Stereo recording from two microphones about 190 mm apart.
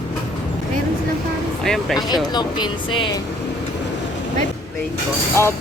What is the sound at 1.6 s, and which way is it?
Speech, centre (ahead or behind).